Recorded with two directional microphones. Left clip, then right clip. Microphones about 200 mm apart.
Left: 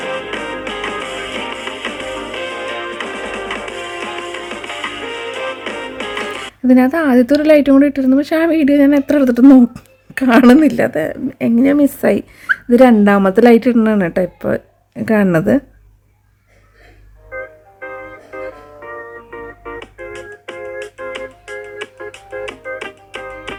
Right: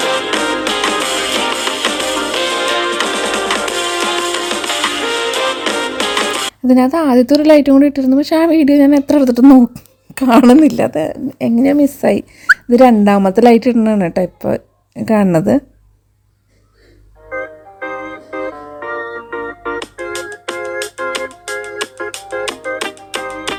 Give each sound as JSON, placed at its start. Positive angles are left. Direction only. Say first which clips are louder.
{"t": 0.0, "sound": "music", "louder": "right 7 dB", "side_deg": -30}
{"t": 6.7, "sound": "speech", "louder": "even", "side_deg": -10}
{"t": 17.2, "sound": "music", "louder": "right 4 dB", "side_deg": -35}